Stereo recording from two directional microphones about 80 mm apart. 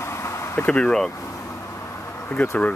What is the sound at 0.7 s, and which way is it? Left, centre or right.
Speech, centre.